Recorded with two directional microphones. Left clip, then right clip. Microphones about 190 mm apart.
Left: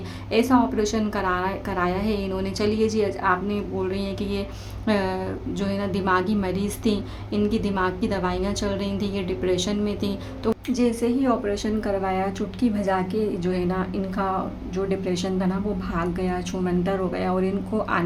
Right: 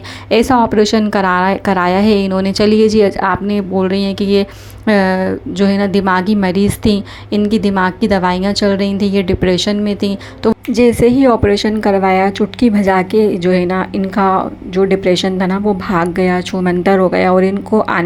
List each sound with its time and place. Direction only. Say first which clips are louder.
0.3 s a woman's voice: right 10 dB; 45° right (ahead or behind)